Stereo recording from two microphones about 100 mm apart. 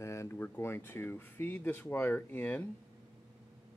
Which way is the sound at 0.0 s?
30° left (ahead or behind).